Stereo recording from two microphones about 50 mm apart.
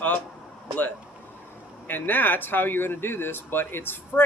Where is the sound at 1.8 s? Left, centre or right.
Left.